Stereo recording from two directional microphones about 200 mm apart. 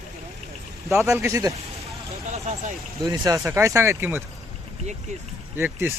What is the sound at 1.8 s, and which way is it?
Vehicle, 35° right (ahead or behind).